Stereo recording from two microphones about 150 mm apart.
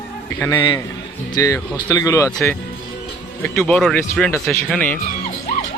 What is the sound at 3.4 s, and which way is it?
Speech, 5° left (ahead or behind).